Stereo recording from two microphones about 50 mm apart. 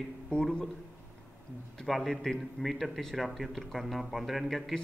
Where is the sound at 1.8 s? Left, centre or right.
Centre.